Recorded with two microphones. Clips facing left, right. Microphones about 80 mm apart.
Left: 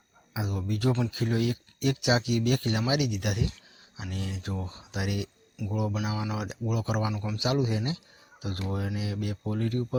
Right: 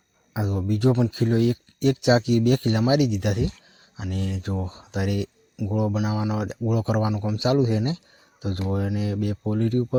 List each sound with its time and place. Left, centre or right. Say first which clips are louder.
0.4 s speech: right 7 dB; right
4.1 s speech: right 6 dB; right